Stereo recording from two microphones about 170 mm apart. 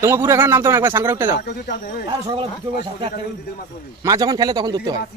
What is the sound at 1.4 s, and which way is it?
Speech, 60° left (ahead or behind).